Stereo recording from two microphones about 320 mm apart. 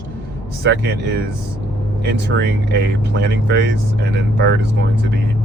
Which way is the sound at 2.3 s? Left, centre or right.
Right.